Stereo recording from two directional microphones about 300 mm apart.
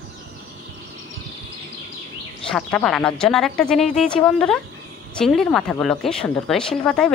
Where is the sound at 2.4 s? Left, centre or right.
Centre.